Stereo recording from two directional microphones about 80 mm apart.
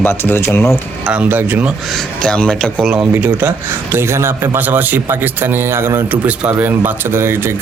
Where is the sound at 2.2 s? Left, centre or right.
Centre.